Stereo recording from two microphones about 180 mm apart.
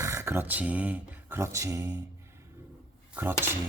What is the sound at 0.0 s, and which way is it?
Speech, 15° right (ahead or behind).